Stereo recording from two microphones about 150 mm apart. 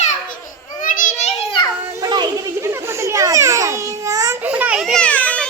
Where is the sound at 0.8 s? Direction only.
60° left (ahead or behind).